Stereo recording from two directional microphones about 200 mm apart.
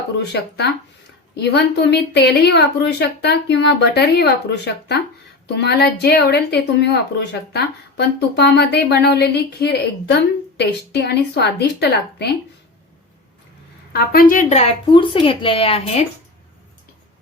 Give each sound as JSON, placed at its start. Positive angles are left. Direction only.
{"t": 0.3, "sound": "speech", "side_deg": 55}
{"t": 13.9, "sound": "speech", "side_deg": 50}